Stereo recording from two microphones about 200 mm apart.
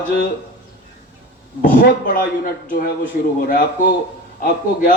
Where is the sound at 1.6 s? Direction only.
40° left (ahead or behind).